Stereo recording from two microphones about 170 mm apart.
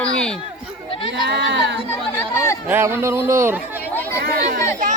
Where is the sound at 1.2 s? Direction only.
85° right.